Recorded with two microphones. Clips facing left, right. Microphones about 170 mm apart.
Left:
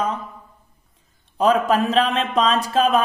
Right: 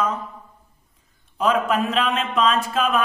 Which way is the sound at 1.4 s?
35° left (ahead or behind).